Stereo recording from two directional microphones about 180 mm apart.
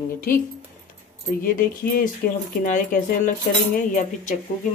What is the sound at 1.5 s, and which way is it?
Speech, 50° left (ahead or behind).